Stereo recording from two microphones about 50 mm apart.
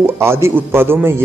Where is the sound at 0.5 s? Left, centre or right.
Right.